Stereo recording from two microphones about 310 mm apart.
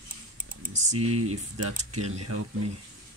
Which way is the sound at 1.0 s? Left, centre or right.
Right.